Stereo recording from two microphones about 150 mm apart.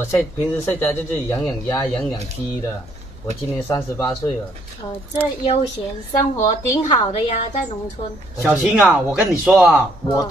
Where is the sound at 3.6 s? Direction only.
20° left (ahead or behind).